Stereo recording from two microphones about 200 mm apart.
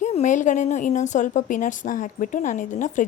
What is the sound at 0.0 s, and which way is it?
A woman's voice, 35° left (ahead or behind).